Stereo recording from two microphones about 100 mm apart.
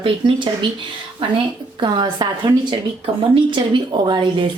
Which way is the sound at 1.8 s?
50° right (ahead or behind).